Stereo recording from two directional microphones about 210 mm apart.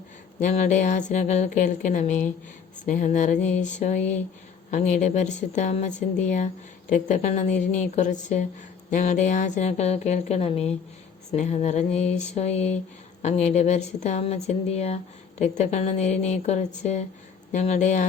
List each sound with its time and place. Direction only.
0.3 s a woman's voice: 35° left (ahead or behind)